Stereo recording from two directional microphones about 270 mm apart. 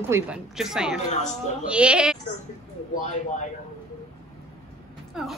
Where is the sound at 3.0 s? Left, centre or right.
Left.